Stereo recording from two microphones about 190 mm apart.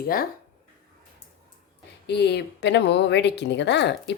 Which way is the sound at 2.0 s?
60° left (ahead or behind).